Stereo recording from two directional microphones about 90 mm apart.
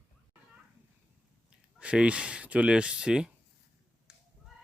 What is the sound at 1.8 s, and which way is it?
Speech, 15° right (ahead or behind).